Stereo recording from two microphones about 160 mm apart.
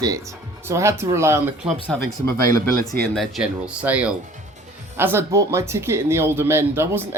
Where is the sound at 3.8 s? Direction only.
10° right (ahead or behind).